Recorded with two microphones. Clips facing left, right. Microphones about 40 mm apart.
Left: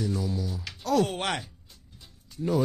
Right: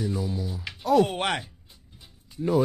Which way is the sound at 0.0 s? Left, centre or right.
Centre.